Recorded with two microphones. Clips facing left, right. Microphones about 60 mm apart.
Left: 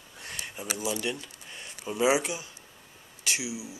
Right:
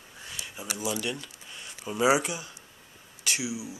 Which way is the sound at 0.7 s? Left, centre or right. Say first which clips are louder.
Even; centre.